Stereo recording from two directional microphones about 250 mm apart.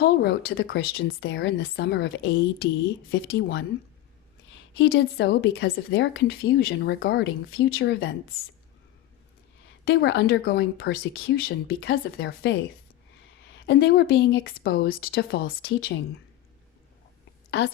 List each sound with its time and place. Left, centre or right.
0.0 s speech: left
4.8 s speech: left
9.8 s speech: left